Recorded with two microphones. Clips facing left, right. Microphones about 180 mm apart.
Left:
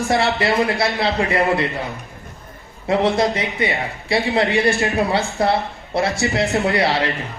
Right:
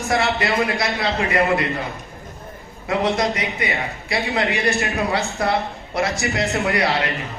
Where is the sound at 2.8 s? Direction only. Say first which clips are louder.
Left 3 dB; 30° left (ahead or behind).